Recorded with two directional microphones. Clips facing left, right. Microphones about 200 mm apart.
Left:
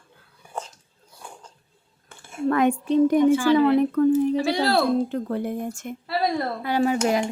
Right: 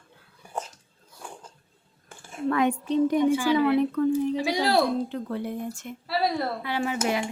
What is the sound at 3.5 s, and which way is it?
Speech, 45° left (ahead or behind).